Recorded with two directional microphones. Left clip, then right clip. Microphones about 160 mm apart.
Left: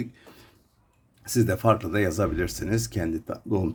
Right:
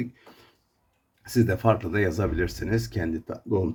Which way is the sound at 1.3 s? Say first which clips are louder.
Left 1 dB; 20° left (ahead or behind).